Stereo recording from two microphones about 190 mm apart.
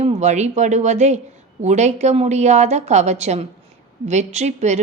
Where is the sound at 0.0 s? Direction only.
35° right (ahead or behind).